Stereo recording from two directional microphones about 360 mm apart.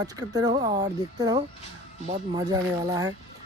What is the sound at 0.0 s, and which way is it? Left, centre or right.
Speech, centre.